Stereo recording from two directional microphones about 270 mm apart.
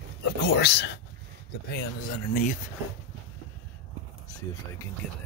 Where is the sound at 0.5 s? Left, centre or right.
Left.